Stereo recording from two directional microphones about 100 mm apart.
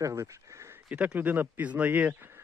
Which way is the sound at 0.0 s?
30° right (ahead or behind).